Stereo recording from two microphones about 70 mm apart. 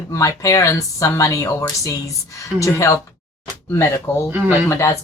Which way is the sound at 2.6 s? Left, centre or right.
Left.